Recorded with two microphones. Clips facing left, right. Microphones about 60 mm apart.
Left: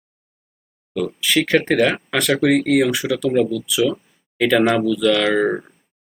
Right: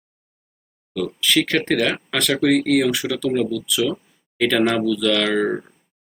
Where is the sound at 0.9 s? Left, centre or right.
Centre.